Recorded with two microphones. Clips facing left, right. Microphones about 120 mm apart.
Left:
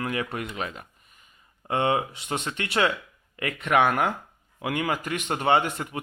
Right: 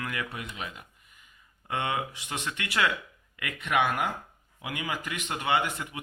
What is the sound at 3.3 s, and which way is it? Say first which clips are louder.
A man's voice: left 5 dB; 40° left (ahead or behind).